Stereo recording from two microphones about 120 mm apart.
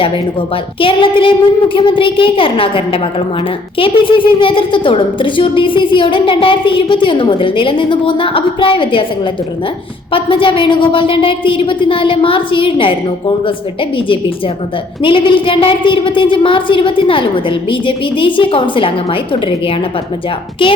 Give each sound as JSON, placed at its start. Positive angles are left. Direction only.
{"t": 0.5, "sound": "a woman's voice", "side_deg": 50}